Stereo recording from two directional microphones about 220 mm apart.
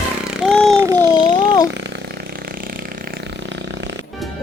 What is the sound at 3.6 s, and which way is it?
Music, 55° right (ahead or behind).